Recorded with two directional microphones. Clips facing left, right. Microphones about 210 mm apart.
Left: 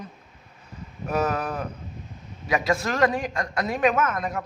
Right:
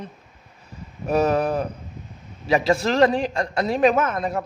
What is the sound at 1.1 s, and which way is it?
A man's voice, 30° right (ahead or behind).